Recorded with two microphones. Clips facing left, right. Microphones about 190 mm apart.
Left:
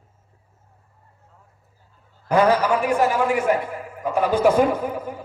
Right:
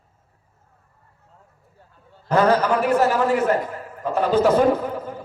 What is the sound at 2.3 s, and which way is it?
A man's voice, 10° left (ahead or behind).